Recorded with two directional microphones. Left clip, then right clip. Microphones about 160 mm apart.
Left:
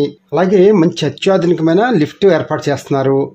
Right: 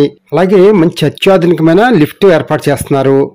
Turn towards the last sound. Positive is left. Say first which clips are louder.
# right 5 dB
turn(degrees=-35)  # may be behind; listen again after turning